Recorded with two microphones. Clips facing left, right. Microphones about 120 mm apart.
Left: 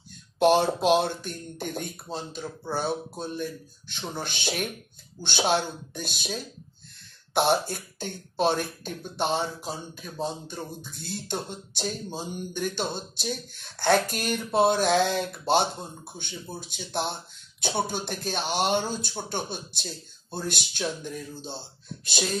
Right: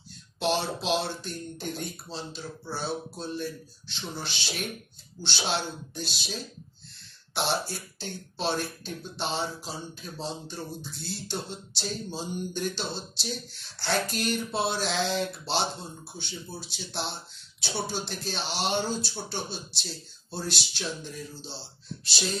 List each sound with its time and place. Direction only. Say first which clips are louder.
0.4 s speech: left 8 dB; 50° left (ahead or behind)